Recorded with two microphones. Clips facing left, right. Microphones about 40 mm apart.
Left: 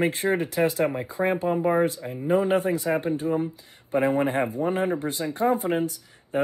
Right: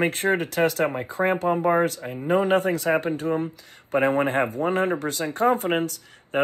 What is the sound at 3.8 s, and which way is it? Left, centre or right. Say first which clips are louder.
Speech: right 1 dB; right.